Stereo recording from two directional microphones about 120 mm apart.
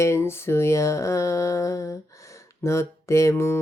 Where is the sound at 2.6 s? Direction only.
25° left (ahead or behind).